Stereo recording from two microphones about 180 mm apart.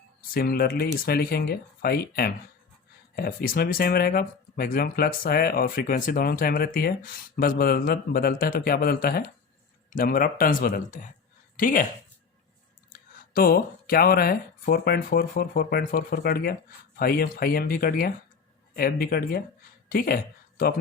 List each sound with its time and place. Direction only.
0.2 s speech: 55° left (ahead or behind)
12.9 s speech: 55° left (ahead or behind)